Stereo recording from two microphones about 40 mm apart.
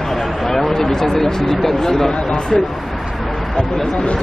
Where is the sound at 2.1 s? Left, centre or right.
Left.